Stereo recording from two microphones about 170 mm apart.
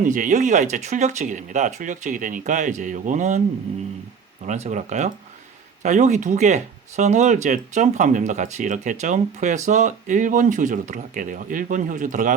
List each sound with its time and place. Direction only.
0.0 s speech: 50° right (ahead or behind)
4.4 s speech: 40° right (ahead or behind)